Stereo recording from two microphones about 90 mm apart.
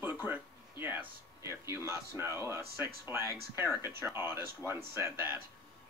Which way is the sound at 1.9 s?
35° right (ahead or behind).